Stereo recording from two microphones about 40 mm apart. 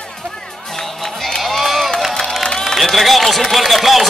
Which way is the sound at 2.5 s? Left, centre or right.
Centre.